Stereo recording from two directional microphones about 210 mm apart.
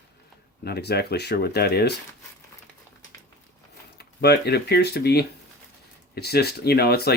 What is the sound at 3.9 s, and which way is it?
Speech, 50° left (ahead or behind).